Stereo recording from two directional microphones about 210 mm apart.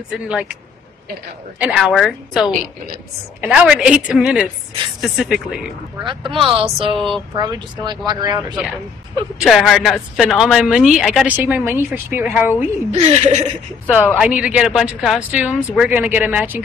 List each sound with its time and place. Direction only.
0.1 s speech: 5° right (ahead or behind)
1.6 s speech: centre (ahead or behind)
6.3 s speech: 25° right (ahead or behind)
7.0 s speech: centre (ahead or behind)
7.3 s speech: 20° right (ahead or behind)
9.4 s speech: centre (ahead or behind)
12.9 s speech: 30° right (ahead or behind)
14.1 s speech: 5° right (ahead or behind)